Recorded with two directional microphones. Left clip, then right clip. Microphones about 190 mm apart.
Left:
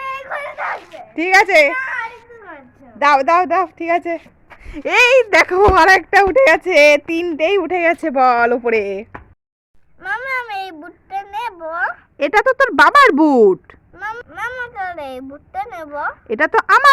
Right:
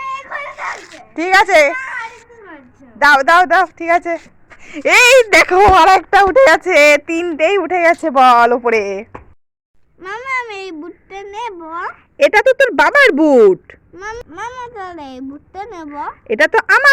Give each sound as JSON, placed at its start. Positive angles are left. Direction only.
{"t": 0.0, "sound": "splash", "side_deg": 0}
{"t": 1.1, "sound": "speech", "side_deg": 10}
{"t": 3.0, "sound": "a woman's voice", "side_deg": 10}
{"t": 4.6, "sound": "a sound", "side_deg": 0}
{"t": 4.9, "sound": "a woman's voice", "side_deg": -10}
{"t": 10.0, "sound": "a sound", "side_deg": 25}
{"t": 12.1, "sound": "a woman's voice", "side_deg": 0}
{"t": 13.9, "sound": "a child's voice", "side_deg": 25}
{"t": 16.2, "sound": "a woman's voice", "side_deg": 0}